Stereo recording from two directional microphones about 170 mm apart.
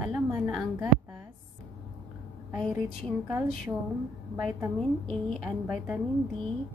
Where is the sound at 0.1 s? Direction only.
Centre (ahead or behind).